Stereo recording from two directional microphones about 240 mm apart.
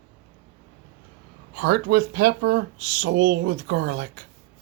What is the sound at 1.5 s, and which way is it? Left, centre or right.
Speech, right.